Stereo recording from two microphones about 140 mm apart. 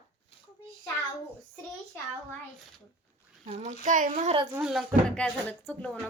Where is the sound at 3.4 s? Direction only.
60° right (ahead or behind).